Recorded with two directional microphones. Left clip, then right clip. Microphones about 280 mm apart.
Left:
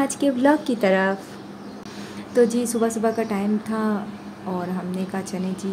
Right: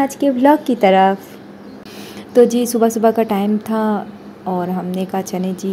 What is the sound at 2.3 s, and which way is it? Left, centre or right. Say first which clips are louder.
A woman's voice: right 7 dB; right.